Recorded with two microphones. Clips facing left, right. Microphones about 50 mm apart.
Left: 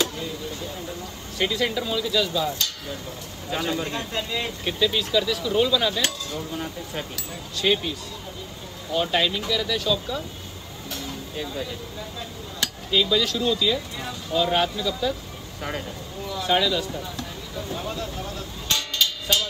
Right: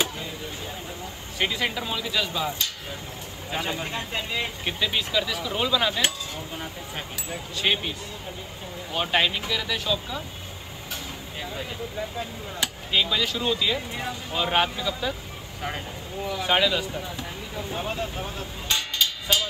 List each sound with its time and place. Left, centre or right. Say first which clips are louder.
1.4 s speech: left 2 dB; centre
8.9 s speech: left 1 dB; right
10.9 s vehicle: left 3 dB; right
12.5 s speech: left 2 dB; right
16.3 s speech: left 1 dB; right
18.7 s music: left 1 dB; right